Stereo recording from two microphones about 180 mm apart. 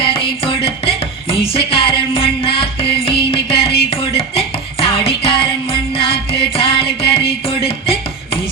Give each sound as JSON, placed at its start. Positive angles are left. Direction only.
{"t": 0.0, "sound": "music", "side_deg": 30}